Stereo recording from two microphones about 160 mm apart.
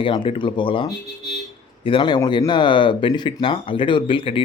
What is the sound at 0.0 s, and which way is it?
Speech, 30° left (ahead or behind).